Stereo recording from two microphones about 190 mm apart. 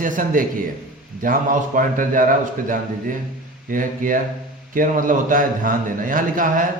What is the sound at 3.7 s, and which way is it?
A man's voice, 45° right (ahead or behind).